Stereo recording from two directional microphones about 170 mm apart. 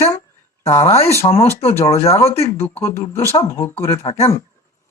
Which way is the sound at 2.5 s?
15° left (ahead or behind).